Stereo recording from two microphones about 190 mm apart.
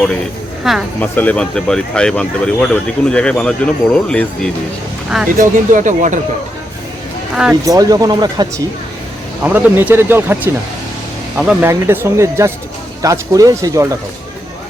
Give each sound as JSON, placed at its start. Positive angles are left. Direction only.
{"t": 0.6, "sound": "speech", "side_deg": 0}
{"t": 0.9, "sound": "speech", "side_deg": 10}
{"t": 5.0, "sound": "speech", "side_deg": -5}
{"t": 5.4, "sound": "speech", "side_deg": -40}
{"t": 7.6, "sound": "speech", "side_deg": -20}
{"t": 9.4, "sound": "speech", "side_deg": -10}